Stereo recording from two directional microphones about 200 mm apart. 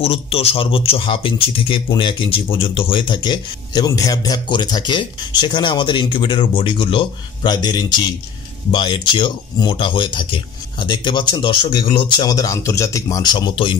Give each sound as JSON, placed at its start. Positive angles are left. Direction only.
{"t": 0.0, "sound": "speech", "side_deg": 30}